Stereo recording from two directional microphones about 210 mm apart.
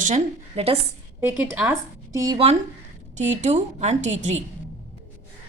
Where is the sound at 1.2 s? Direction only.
5° right (ahead or behind).